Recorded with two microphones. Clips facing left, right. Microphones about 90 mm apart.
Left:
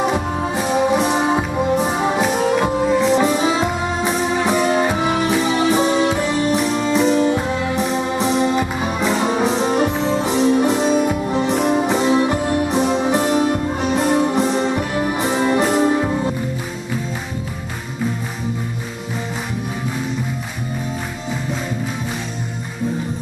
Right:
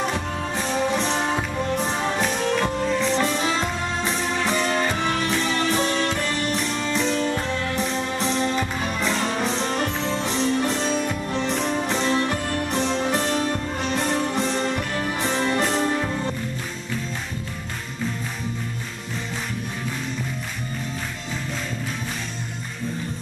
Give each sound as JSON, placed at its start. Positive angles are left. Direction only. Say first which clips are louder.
{"t": 0.4, "sound": "music", "louder": "left 5 dB", "side_deg": 10}